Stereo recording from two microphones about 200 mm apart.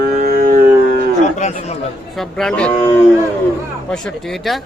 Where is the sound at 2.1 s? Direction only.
5° left (ahead or behind).